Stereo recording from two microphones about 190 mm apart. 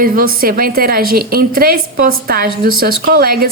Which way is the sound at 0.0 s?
50° right (ahead or behind).